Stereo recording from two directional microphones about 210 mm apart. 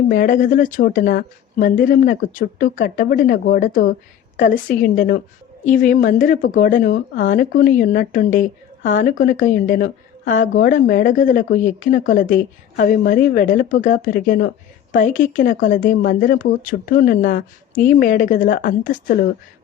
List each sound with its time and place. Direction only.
0.1 s speech: 40° left (ahead or behind)